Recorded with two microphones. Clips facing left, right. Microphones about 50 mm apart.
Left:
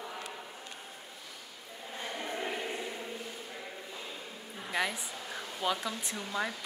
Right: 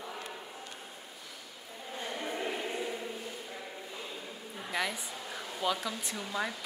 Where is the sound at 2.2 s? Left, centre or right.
Centre.